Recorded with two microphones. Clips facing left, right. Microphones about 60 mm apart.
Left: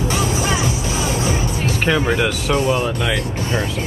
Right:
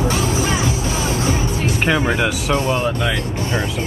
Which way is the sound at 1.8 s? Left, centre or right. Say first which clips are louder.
Left 1 dB; centre.